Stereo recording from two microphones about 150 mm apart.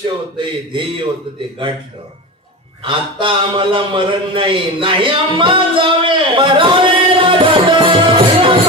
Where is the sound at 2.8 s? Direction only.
35° right (ahead or behind).